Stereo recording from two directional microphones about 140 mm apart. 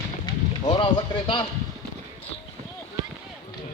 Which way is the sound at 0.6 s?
35° left (ahead or behind).